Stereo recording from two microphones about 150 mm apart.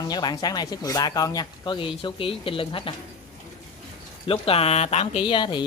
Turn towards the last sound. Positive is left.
turn(degrees=30)  # may be behind; listen again after turning